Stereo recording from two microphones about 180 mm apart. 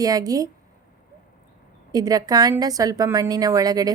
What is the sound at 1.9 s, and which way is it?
A woman's voice, 20° right (ahead or behind).